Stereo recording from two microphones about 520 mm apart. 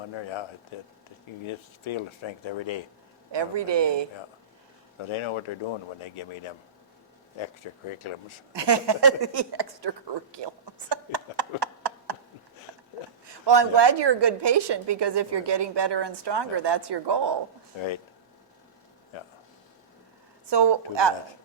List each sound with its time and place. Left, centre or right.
0.1 s speech: left
3.3 s a woman's voice: right
5.0 s speech: left
7.3 s speech: left
8.5 s a woman's voice: right
10.3 s a sound: right
12.7 s sniff: right
13.2 s a woman's voice: right
19.1 s speech: left
20.5 s a woman's voice: right